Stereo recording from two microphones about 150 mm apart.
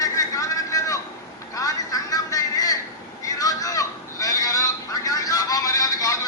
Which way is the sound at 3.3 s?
25° left (ahead or behind).